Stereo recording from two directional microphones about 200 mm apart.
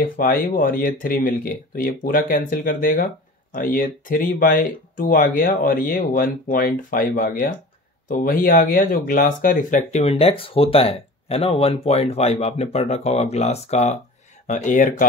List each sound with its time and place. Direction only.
0.0 s speech: 45° left (ahead or behind)